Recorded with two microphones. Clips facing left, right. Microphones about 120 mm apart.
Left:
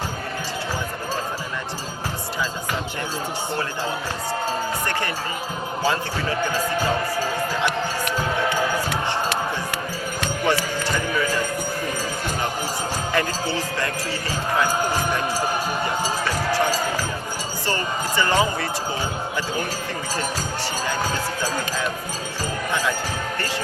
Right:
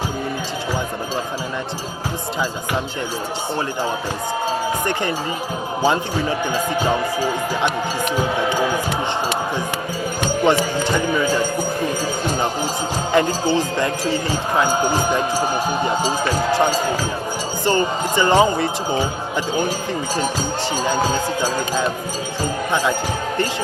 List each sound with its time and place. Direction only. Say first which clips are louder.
5.8 s speech: right 5 dB; 20° right (ahead or behind)
10.2 s a sound: right 6 dB; 25° right (ahead or behind)
13.1 s speech: right 8 dB; 25° right (ahead or behind)
20.8 s speech: right 6 dB; 25° right (ahead or behind)